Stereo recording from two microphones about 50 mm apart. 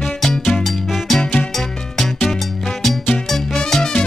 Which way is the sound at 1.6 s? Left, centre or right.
Centre.